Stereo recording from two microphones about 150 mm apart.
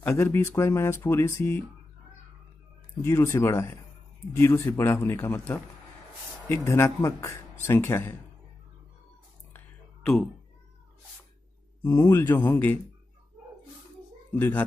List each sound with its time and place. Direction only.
0.0 s speech: 15° left (ahead or behind)
3.0 s speech: 15° left (ahead or behind)
11.8 s a man's voice: 25° left (ahead or behind)
12.1 s speech: 15° left (ahead or behind)
14.3 s speech: 15° left (ahead or behind)